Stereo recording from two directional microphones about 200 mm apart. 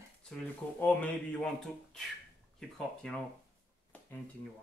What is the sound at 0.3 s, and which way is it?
Speech, 5° left (ahead or behind).